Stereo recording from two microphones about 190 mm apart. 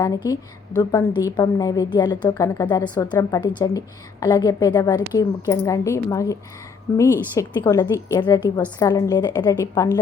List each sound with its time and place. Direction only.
0.8 s a woman's voice: 20° left (ahead or behind)